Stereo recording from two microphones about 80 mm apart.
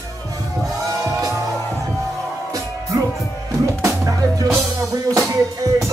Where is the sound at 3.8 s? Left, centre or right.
Right.